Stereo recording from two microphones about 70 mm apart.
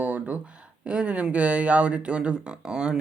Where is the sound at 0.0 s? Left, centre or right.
Right.